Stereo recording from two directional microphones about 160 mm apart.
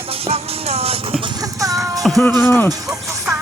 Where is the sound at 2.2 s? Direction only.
10° left (ahead or behind).